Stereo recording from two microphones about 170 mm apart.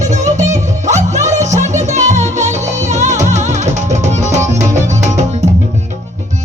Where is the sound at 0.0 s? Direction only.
45° right (ahead or behind).